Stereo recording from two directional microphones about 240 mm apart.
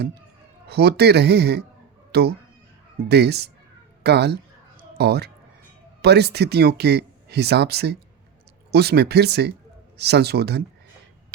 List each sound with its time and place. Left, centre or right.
0.7 s speech: right